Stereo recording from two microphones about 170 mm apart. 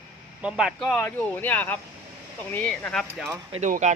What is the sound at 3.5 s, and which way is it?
Speech, 45° right (ahead or behind).